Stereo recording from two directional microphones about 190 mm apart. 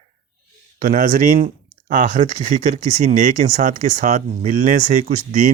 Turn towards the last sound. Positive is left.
turn(degrees=-40)  # may be behind; listen again after turning